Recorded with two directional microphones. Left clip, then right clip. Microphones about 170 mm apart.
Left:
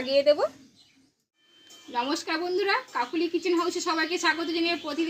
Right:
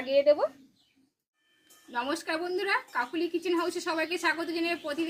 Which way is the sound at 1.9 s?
20° right (ahead or behind).